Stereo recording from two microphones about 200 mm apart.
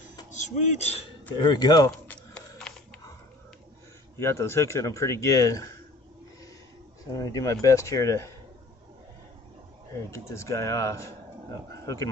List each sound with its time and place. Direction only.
0.3 s speech: 35° left (ahead or behind)
1.3 s speech: 20° left (ahead or behind)
1.9 s a sound: 5° left (ahead or behind)
4.2 s speech: 15° left (ahead or behind)
7.1 s speech: 15° left (ahead or behind)
10.1 s a man's voice: 15° left (ahead or behind)